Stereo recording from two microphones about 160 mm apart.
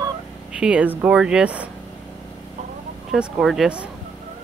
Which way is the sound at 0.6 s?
5° right (ahead or behind).